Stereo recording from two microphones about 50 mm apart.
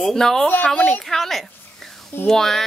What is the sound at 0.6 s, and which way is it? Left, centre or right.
Speech, centre.